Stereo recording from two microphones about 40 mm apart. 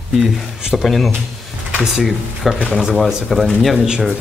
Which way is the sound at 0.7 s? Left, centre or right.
Centre.